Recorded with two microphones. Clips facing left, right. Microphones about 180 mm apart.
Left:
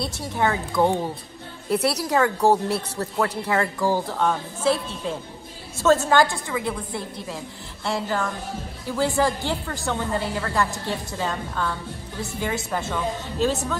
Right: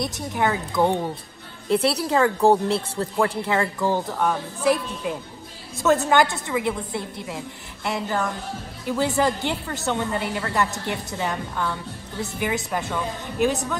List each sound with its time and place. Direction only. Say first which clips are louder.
0.0 s a woman's voice: even; 15° right (ahead or behind)
0.7 s speech: even; 5° left (ahead or behind)
1.7 s a woman's voice: right 1 dB; 25° right (ahead or behind)
4.2 s a woman's voice: even; 10° right (ahead or behind)